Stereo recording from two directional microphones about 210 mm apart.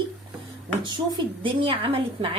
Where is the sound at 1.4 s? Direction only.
25° right (ahead or behind).